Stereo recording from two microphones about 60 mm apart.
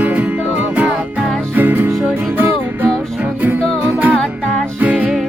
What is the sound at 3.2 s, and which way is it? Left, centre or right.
Music, right.